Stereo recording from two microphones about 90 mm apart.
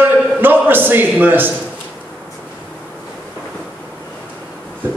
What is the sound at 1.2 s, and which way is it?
Speech, 20° right (ahead or behind).